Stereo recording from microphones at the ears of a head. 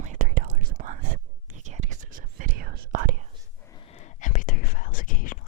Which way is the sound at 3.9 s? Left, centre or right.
Left.